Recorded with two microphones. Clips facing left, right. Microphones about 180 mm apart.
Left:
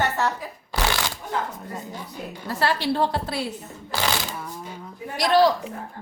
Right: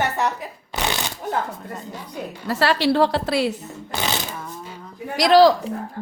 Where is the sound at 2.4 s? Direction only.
90° right.